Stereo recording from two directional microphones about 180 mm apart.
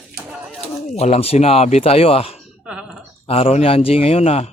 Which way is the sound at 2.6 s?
5° right (ahead or behind).